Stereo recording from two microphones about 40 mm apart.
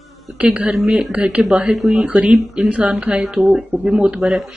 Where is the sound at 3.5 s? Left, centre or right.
Centre.